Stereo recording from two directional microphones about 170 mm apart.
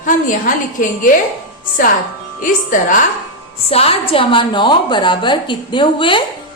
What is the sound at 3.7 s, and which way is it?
A woman's voice, 35° left (ahead or behind).